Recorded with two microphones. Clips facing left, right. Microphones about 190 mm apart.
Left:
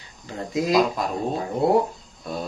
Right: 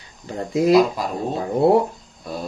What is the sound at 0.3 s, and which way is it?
Speech, 30° right (ahead or behind).